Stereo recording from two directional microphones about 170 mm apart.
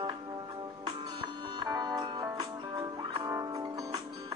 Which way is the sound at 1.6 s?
25° right (ahead or behind).